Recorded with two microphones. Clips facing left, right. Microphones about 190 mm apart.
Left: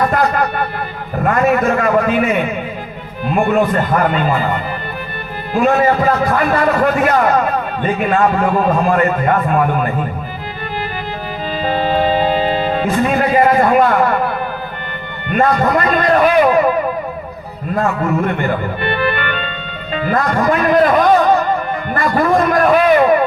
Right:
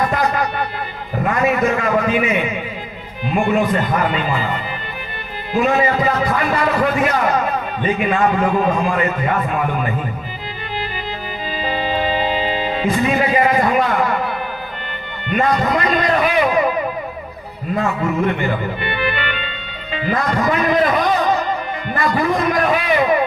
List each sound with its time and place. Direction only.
0.1 s a sound: 50° left (ahead or behind)
1.2 s a man's voice: 50° left (ahead or behind)
11.6 s music: 45° left (ahead or behind)
15.3 s a man's voice: 50° left (ahead or behind)
17.7 s a man's voice: 50° left (ahead or behind)